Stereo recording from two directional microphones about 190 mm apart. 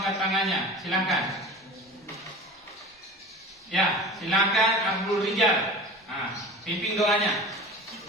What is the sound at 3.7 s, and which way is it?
A man's voice, centre (ahead or behind).